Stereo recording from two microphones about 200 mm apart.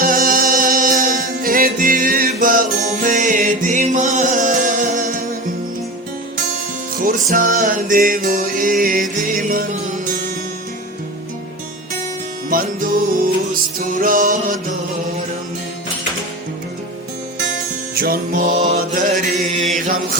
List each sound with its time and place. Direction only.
0.0 s music: 45° right (ahead or behind)
6.9 s music: 45° right (ahead or behind)
12.5 s music: 45° right (ahead or behind)
17.9 s music: 50° right (ahead or behind)
18.5 s mantra: 35° right (ahead or behind)